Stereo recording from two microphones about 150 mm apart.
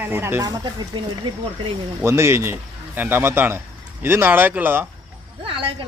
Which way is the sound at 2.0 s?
20° right (ahead or behind).